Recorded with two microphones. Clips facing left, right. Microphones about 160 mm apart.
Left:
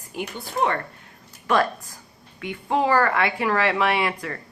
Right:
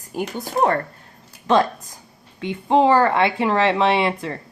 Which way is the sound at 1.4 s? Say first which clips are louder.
Right 4 dB; 25° right (ahead or behind).